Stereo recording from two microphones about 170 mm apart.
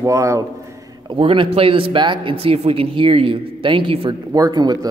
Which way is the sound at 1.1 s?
30° right (ahead or behind).